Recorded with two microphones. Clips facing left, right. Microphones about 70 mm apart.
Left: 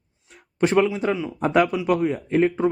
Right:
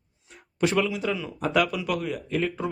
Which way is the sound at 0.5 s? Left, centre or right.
Left.